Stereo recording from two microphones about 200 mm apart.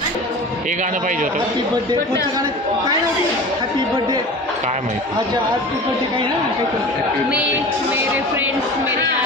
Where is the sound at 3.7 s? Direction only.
20° right (ahead or behind).